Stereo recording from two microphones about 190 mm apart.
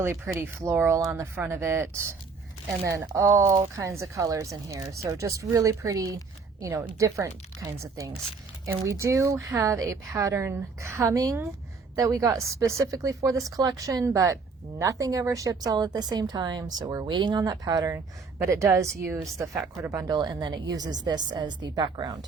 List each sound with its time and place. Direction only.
0.0 s speech: 15° right (ahead or behind)